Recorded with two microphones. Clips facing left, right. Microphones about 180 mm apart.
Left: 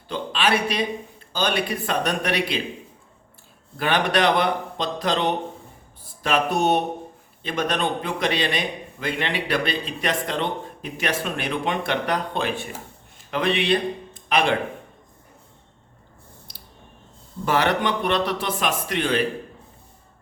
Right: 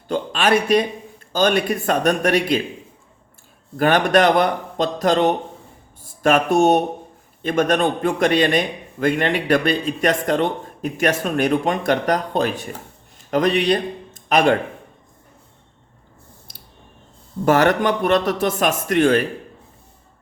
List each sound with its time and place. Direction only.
0.1 s a man's voice: 45° right (ahead or behind)
3.8 s a man's voice: 45° right (ahead or behind)
16.5 s a sound: 50° right (ahead or behind)
17.4 s a man's voice: 45° right (ahead or behind)